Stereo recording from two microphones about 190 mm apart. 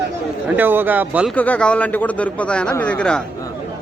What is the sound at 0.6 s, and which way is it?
Speech, 10° right (ahead or behind).